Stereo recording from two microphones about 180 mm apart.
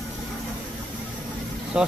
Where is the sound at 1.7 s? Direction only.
5° right (ahead or behind).